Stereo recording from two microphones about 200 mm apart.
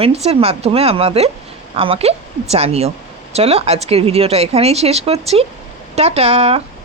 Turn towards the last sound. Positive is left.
turn(degrees=-30)  # may be behind; listen again after turning